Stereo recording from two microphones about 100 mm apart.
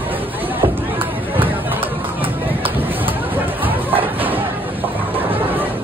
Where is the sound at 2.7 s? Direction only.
20° right (ahead or behind).